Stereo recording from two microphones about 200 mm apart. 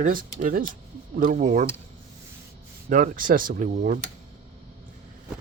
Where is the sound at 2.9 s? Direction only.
40° right (ahead or behind).